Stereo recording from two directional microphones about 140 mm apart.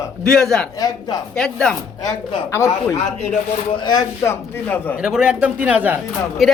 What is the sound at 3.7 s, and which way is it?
Speech, 30° left (ahead or behind).